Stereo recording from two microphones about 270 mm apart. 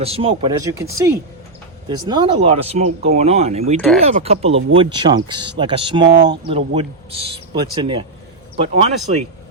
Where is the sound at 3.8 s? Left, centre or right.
Centre.